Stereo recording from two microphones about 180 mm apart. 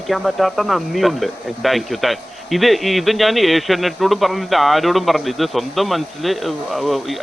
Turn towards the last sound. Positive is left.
turn(degrees=0)  # may be behind; listen again after turning